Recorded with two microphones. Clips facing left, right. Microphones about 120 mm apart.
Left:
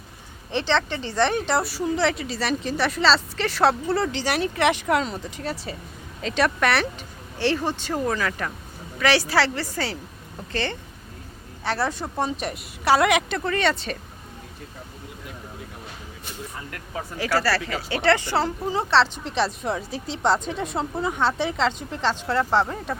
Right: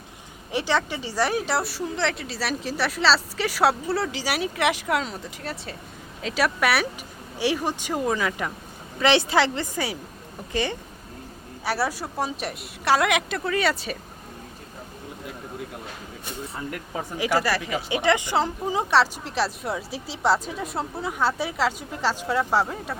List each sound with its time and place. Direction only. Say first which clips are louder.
0.5 s a woman's voice: left 1 dB; 10° right (ahead or behind)
17.2 s speech: even; 15° right (ahead or behind)